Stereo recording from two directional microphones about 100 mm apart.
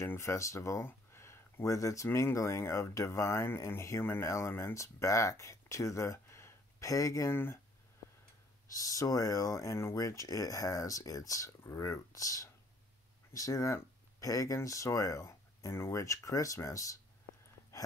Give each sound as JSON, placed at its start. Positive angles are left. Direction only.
{"t": 0.0, "sound": "speech", "side_deg": 25}
{"t": 8.7, "sound": "speech", "side_deg": 35}
{"t": 17.7, "sound": "sneeze", "side_deg": 30}